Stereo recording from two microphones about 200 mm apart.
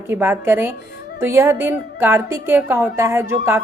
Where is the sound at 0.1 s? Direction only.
10° right (ahead or behind).